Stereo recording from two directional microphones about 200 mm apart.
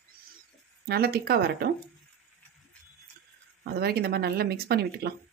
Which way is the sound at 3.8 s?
50° right (ahead or behind).